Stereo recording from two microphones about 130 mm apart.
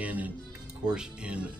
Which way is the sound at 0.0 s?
10° right (ahead or behind).